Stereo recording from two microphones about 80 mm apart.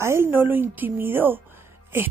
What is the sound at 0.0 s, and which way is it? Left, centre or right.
Speech, right.